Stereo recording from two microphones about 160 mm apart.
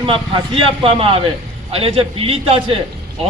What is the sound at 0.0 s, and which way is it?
A man's voice, 35° right (ahead or behind).